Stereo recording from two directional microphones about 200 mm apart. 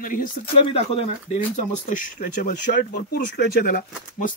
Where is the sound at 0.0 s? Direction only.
45° left (ahead or behind).